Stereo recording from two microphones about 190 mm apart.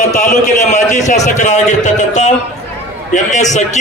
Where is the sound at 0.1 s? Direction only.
40° left (ahead or behind).